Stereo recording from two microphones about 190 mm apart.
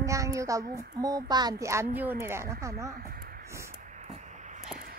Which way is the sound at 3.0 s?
50° right (ahead or behind).